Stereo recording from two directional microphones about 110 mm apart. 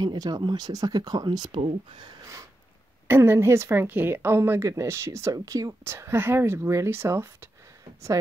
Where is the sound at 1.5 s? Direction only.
65° right (ahead or behind).